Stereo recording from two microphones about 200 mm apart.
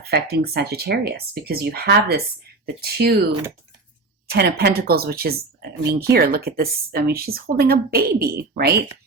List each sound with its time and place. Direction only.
0.0 s speech: 55° right (ahead or behind)
4.3 s speech: 50° right (ahead or behind)